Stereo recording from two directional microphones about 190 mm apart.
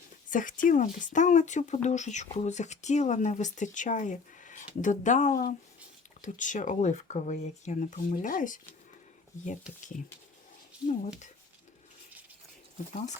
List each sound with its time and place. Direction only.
0.3 s speech: 45° left (ahead or behind)